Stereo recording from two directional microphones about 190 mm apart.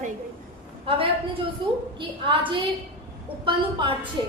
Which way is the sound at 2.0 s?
25° right (ahead or behind).